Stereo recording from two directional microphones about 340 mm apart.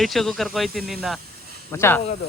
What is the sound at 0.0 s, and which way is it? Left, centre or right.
Speech, centre.